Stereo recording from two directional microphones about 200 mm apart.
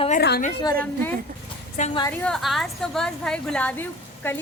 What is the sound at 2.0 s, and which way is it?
A woman's voice, 5° left (ahead or behind).